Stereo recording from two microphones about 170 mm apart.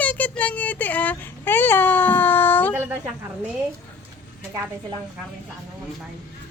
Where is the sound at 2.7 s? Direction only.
10° right (ahead or behind).